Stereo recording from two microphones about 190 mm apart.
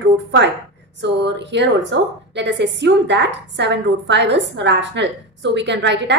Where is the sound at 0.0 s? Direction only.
65° right (ahead or behind).